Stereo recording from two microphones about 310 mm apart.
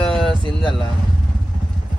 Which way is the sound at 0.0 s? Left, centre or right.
Centre.